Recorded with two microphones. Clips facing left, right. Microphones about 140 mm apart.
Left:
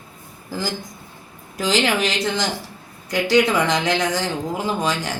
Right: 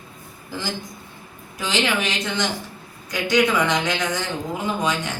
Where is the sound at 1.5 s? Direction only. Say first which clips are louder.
Left 3 dB; 40° left (ahead or behind).